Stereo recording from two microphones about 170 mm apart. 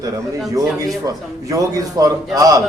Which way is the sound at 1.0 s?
20° right (ahead or behind).